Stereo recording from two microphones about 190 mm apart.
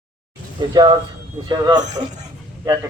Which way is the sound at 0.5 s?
20° right (ahead or behind).